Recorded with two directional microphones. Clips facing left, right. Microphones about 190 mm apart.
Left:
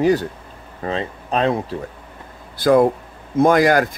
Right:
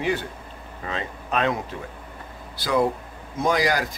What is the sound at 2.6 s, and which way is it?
A man's voice, 50° left (ahead or behind).